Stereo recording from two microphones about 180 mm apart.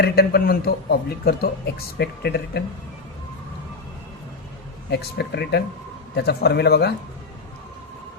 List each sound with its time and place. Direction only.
0.0 s a man's voice: 60° left (ahead or behind)
4.9 s a man's voice: 65° left (ahead or behind)